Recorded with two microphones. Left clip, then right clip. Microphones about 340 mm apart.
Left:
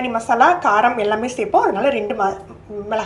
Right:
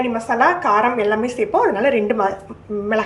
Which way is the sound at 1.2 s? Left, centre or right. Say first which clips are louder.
Right 2 dB; centre.